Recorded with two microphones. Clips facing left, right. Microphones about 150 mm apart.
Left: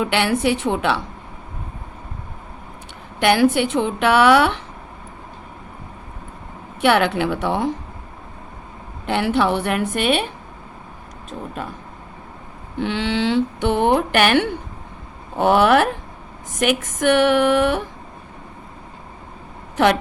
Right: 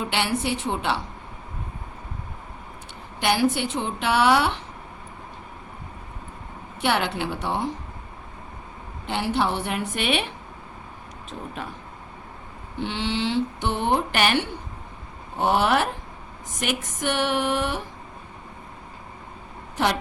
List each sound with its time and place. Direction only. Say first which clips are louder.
0.0 s speech: left 7 dB; 60° left (ahead or behind)
3.2 s speech: left 6 dB; 60° left (ahead or behind)
6.8 s speech: left 7 dB; 60° left (ahead or behind)
9.0 s speech: left 6 dB; 60° left (ahead or behind); by 10.2 s 45° left (ahead or behind)
11.3 s speech: left 5 dB; 45° left (ahead or behind)
12.8 s speech: left 5 dB; 60° left (ahead or behind)
19.7 s speech: left 7 dB; 60° left (ahead or behind)